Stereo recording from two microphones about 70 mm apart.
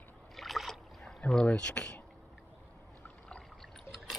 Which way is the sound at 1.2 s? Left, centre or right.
Centre.